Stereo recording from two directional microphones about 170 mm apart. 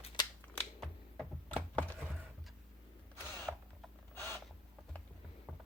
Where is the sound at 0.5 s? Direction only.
5° left (ahead or behind).